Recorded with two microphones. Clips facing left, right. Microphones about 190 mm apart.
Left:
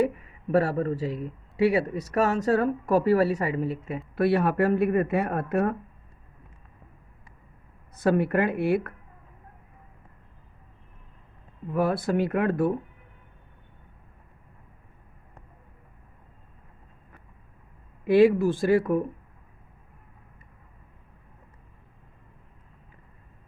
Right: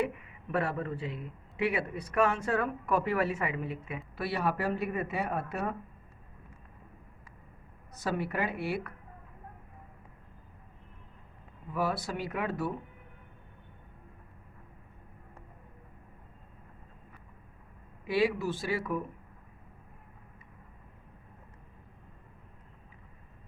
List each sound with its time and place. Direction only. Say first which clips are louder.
0.0 s speech: left 7 dB; 40° left (ahead or behind)
4.1 s speech: left 9 dB; 55° left (ahead or behind)
7.9 s speech: left 10 dB; 55° left (ahead or behind)
11.7 s speech: left 8 dB; 55° left (ahead or behind)
18.0 s speech: left 10 dB; 50° left (ahead or behind)